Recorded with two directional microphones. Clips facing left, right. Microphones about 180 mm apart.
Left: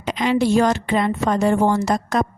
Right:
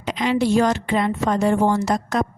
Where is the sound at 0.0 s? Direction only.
50° left (ahead or behind).